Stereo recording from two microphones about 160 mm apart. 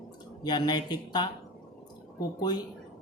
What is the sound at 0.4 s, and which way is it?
Speech, 25° left (ahead or behind).